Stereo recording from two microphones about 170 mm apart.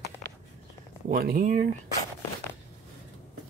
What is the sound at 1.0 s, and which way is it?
Speech, 55° right (ahead or behind).